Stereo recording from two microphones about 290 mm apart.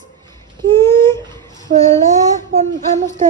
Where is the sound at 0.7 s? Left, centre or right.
Centre.